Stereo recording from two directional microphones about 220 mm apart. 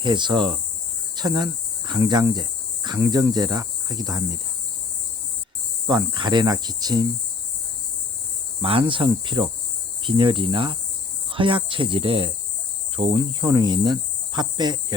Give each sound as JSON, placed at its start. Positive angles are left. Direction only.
{"t": 0.0, "sound": "speech", "side_deg": -20}
{"t": 5.9, "sound": "speech", "side_deg": -20}
{"t": 8.6, "sound": "speech", "side_deg": -25}